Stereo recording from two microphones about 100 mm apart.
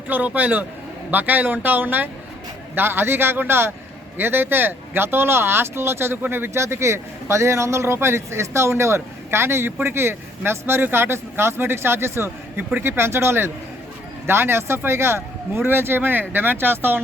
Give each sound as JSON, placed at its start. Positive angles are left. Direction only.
{"t": 0.1, "sound": "speech", "side_deg": -15}